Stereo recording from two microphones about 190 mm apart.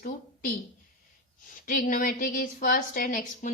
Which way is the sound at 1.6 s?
45° left (ahead or behind).